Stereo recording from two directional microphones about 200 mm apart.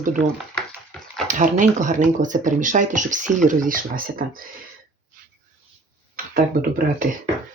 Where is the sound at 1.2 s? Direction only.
40° right (ahead or behind).